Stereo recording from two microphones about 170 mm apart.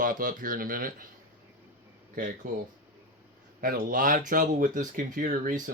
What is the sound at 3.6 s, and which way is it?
Speech, 55° right (ahead or behind).